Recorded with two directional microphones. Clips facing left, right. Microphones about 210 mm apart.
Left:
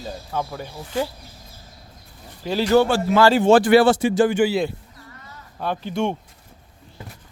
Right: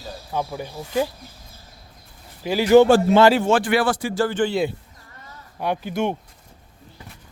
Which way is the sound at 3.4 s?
35° left (ahead or behind).